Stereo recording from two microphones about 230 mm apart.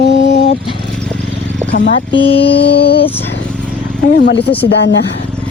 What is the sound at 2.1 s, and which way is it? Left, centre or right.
Speech, left.